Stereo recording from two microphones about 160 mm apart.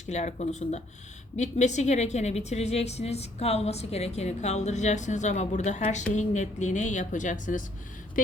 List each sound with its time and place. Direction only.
0.0 s a woman's voice: 45° left (ahead or behind)